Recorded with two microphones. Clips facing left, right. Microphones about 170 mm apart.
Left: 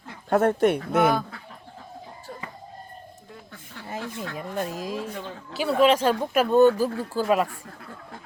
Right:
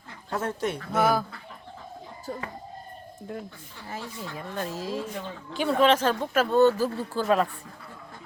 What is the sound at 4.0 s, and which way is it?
Speech, 65° left (ahead or behind).